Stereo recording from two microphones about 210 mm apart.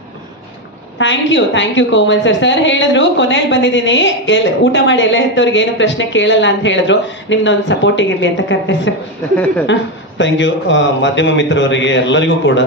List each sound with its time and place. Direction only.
0.9 s a woman's voice: 60° left (ahead or behind)